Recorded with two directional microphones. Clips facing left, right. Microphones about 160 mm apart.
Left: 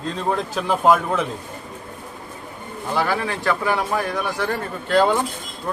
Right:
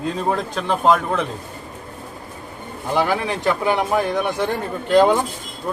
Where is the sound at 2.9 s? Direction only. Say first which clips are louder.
Right 2 dB; 15° right (ahead or behind).